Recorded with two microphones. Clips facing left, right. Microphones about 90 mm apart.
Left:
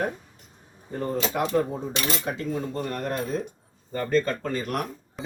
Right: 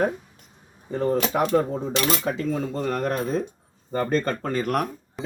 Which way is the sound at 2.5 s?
80° right.